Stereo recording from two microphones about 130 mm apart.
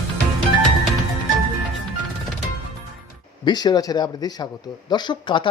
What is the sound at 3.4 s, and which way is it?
A man's voice, 35° left (ahead or behind).